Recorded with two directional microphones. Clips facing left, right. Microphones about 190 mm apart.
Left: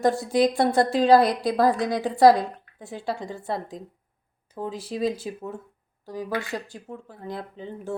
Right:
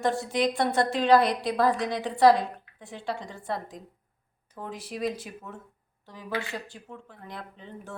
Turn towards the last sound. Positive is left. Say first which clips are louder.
# left 9 dB
turn(degrees=30)  # may be behind; listen again after turning